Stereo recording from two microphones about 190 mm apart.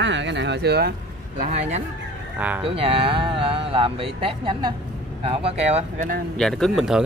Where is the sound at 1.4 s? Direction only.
35° right (ahead or behind).